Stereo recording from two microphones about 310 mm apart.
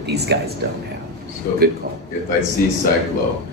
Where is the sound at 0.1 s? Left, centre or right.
Right.